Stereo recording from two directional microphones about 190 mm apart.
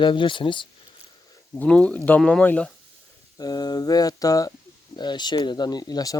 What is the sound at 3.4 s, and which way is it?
Speech, 20° left (ahead or behind).